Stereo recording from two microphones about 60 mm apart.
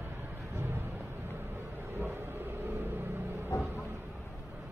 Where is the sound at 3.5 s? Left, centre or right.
Left.